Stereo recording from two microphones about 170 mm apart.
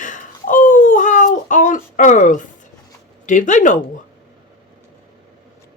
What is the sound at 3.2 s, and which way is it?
Speech, 50° left (ahead or behind).